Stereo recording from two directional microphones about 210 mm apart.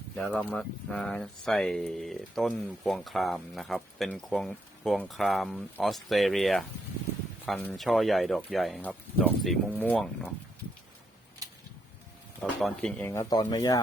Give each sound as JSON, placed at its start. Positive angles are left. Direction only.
{"t": 0.2, "sound": "speech", "side_deg": 0}
{"t": 11.4, "sound": "a sound", "side_deg": -15}
{"t": 12.4, "sound": "speech", "side_deg": 0}